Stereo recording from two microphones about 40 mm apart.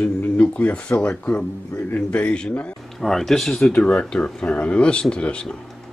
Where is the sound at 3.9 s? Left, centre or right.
Left.